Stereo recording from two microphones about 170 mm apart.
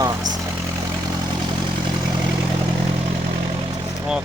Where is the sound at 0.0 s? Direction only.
25° right (ahead or behind).